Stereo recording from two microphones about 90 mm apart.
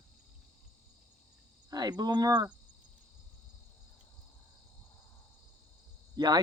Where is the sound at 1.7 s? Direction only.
45° right (ahead or behind).